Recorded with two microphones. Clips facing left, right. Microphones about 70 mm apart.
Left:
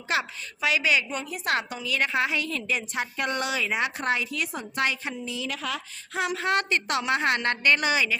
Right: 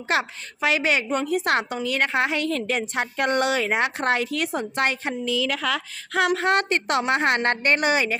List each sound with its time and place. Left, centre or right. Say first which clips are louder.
0.1 s a woman's voice: right 3 dB; right
5.2 s a woman's voice: right 9 dB; right
6.3 s a woman's voice: right 4 dB; right